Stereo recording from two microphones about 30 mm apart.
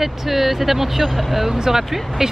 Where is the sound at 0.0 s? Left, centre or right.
Centre.